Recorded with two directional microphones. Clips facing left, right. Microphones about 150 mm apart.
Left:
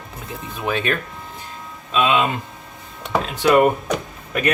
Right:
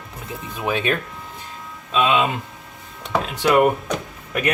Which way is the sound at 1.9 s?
5° right (ahead or behind).